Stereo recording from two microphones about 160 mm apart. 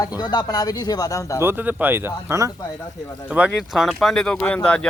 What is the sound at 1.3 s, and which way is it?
Speech, 15° right (ahead or behind).